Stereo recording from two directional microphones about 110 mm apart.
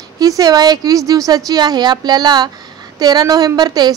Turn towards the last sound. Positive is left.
turn(degrees=-40)  # may be behind; listen again after turning